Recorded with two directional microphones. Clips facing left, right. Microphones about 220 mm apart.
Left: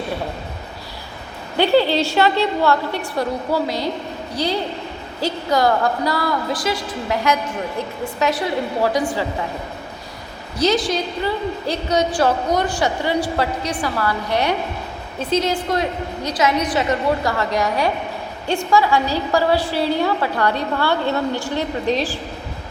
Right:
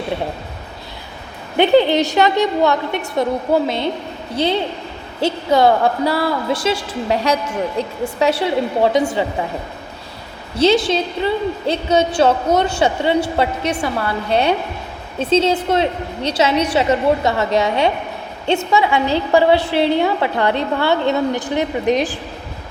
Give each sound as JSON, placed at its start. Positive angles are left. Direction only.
{"t": 1.5, "sound": "a woman's voice", "side_deg": -20}
{"t": 10.6, "sound": "a woman's voice", "side_deg": -25}